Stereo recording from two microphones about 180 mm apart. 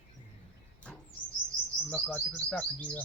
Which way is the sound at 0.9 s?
5° left (ahead or behind).